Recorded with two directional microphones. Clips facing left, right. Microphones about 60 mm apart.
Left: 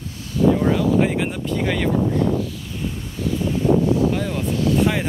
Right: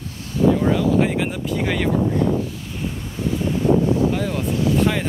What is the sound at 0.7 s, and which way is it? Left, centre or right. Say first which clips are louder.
Speech: even; centre.